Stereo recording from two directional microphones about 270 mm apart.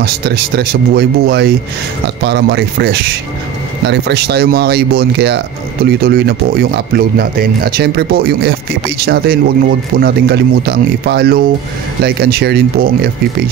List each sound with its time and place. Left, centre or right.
0.0 s speech: right